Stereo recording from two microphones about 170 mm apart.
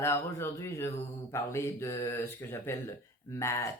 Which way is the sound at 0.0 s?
15° left (ahead or behind).